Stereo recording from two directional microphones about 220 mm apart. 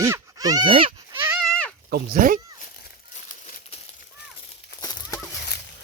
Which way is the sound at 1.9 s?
45° right (ahead or behind).